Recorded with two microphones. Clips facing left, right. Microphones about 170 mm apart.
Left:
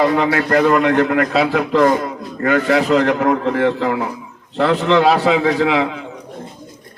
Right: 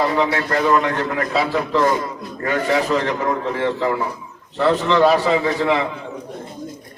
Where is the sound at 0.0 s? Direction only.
65° left (ahead or behind).